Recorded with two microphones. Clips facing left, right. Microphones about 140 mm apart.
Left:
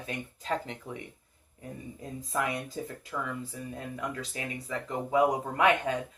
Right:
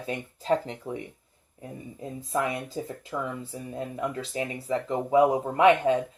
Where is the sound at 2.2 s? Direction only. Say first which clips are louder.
Right 3 dB; 30° right (ahead or behind).